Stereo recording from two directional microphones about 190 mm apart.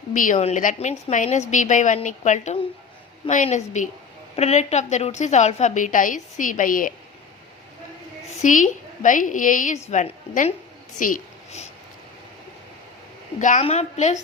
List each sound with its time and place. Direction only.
0.1 s a woman's voice: 45° left (ahead or behind)
8.3 s a woman's voice: 40° left (ahead or behind)
13.4 s a woman's voice: 40° left (ahead or behind)